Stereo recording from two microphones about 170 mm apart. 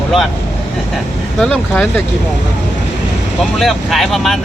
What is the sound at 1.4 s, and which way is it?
Speech, 5° left (ahead or behind).